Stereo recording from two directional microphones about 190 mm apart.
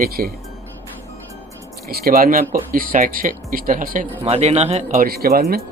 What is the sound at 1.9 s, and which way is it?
Speech, 55° right (ahead or behind).